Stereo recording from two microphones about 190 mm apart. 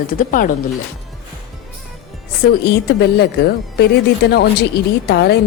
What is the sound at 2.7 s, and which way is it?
Speech, 55° left (ahead or behind).